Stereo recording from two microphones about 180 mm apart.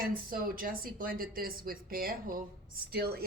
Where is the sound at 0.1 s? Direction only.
55° right (ahead or behind).